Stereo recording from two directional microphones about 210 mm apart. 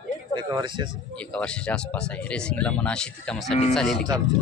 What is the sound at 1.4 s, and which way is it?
Speech, 5° left (ahead or behind).